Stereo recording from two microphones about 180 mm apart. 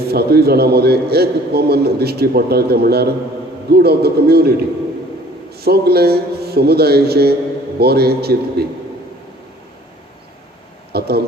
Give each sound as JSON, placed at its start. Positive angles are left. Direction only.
{"t": 0.1, "sound": "a man's voice", "side_deg": -60}
{"t": 10.9, "sound": "a man's voice", "side_deg": -60}